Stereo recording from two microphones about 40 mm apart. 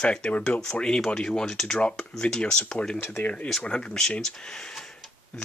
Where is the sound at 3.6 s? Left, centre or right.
Left.